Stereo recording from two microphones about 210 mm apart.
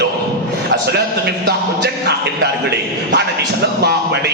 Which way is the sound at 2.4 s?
50° right (ahead or behind).